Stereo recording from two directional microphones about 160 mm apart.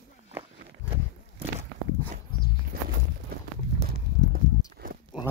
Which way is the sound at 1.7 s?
90° right.